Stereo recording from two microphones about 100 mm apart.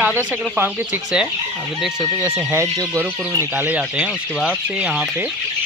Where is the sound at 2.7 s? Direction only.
30° right (ahead or behind).